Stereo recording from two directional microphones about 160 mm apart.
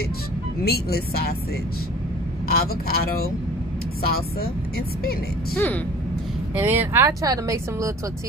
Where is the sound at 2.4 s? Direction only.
70° left (ahead or behind).